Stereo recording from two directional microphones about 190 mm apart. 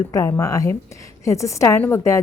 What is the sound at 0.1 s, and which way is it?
A woman's voice, 15° left (ahead or behind).